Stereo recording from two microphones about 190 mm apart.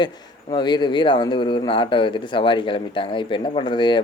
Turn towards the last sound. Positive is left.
turn(degrees=25)  # may be behind; listen again after turning